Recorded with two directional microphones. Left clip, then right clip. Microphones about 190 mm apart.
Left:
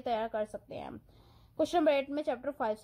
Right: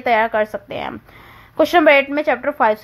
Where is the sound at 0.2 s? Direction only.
35° right (ahead or behind).